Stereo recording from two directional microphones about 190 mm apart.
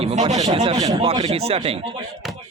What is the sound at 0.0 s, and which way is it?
Speech, 35° right (ahead or behind).